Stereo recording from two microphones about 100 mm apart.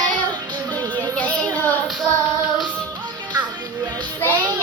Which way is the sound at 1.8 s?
Centre (ahead or behind).